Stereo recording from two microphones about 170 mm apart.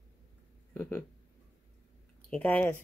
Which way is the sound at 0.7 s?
15° left (ahead or behind).